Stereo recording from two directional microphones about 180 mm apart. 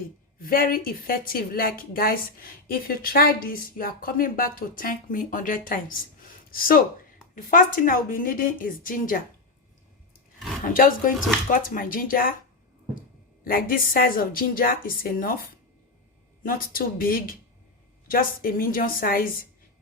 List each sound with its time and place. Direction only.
0.3 s a woman's voice: 55° left (ahead or behind)
10.8 s a woman's voice: 50° left (ahead or behind)
13.4 s a woman's voice: 55° left (ahead or behind)
16.5 s a woman's voice: 55° left (ahead or behind)